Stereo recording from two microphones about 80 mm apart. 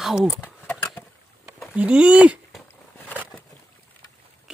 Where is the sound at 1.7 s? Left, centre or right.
Centre.